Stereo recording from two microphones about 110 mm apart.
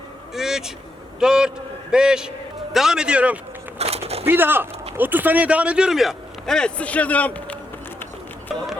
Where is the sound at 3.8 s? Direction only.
70° right (ahead or behind).